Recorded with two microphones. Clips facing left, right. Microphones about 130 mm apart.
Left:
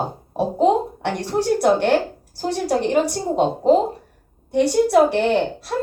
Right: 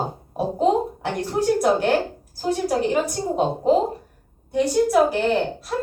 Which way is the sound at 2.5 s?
70° left (ahead or behind).